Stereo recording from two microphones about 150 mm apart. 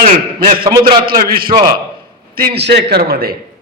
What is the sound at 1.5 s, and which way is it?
Speech, 30° right (ahead or behind).